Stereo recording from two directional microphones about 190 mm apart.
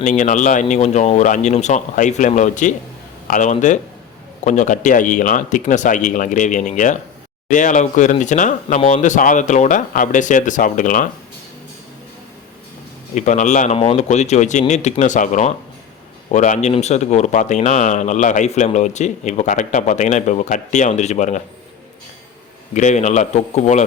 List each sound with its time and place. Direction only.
0.0 s a man's voice: 40° left (ahead or behind)
13.1 s a man's voice: 40° left (ahead or behind)
22.7 s a man's voice: 40° left (ahead or behind)